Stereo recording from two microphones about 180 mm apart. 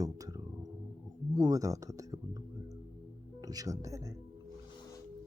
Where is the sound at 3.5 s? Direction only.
20° right (ahead or behind).